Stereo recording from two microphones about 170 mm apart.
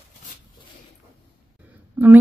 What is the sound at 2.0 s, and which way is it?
Speech, 10° right (ahead or behind).